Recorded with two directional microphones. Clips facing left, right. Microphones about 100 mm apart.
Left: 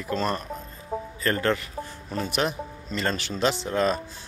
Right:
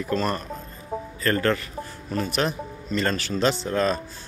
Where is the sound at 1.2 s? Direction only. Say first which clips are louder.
Right 2 dB; 15° left (ahead or behind).